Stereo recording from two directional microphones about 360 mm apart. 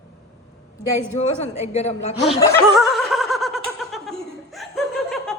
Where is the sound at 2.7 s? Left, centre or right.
Centre.